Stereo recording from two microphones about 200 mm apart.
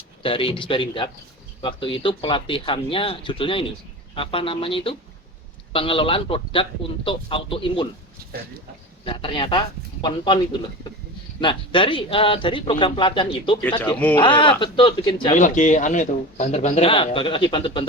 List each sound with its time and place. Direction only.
0.2 s a man's voice: 25° left (ahead or behind)
9.0 s a man's voice: 25° left (ahead or behind)
13.6 s speech: 5° left (ahead or behind)
14.2 s a man's voice: 25° left (ahead or behind)
15.4 s speech: 40° left (ahead or behind)